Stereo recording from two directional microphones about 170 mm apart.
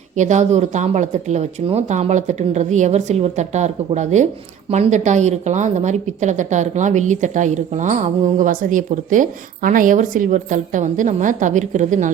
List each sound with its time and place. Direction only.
0.2 s a woman's voice: 45° right (ahead or behind)